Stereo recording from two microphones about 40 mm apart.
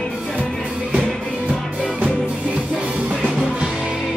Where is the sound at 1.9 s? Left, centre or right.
Right.